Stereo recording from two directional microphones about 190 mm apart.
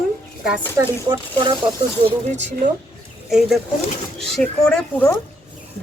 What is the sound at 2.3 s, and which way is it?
Speech, 35° right (ahead or behind).